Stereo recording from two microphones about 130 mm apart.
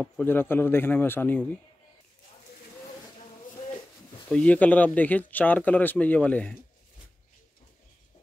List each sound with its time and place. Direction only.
0.0 s speech: 15° left (ahead or behind)
4.3 s speech: 10° left (ahead or behind)